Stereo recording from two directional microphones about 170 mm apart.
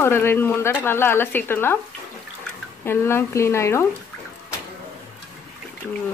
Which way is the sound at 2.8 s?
15° left (ahead or behind).